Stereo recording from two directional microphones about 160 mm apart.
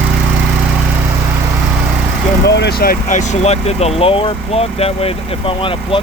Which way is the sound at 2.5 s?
90° left.